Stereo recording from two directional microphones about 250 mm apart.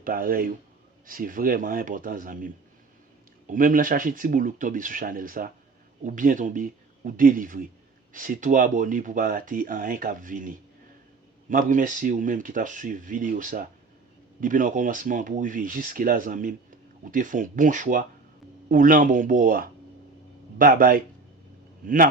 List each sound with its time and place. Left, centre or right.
0.0 s speech: right